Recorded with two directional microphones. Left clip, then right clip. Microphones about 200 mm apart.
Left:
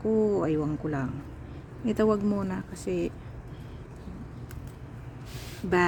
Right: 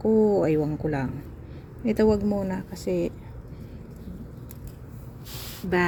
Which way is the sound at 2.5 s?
5° left (ahead or behind).